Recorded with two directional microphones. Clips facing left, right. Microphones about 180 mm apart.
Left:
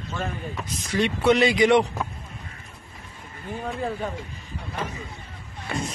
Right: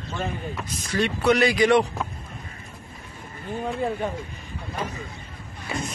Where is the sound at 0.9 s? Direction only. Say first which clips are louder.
Left 1 dB; 15° left (ahead or behind).